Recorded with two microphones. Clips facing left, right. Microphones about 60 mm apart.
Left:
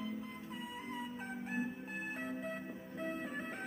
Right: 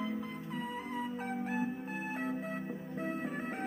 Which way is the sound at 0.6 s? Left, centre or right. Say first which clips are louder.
Right 6 dB; right.